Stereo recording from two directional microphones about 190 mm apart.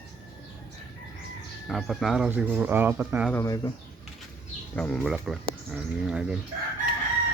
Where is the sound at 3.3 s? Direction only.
15° left (ahead or behind).